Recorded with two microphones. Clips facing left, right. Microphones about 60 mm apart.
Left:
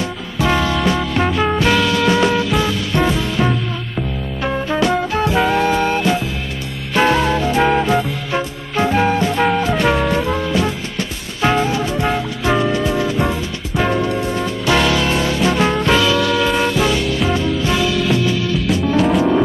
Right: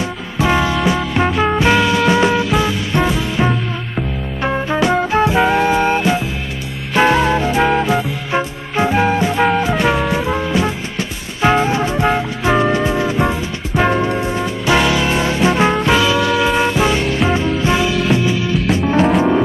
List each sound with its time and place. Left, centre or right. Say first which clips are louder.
0.0 s music: right 1 dB; centre
1.6 s music: right 3 dB; right
7.6 s music: left 1 dB; centre
8.3 s music: right 2 dB; centre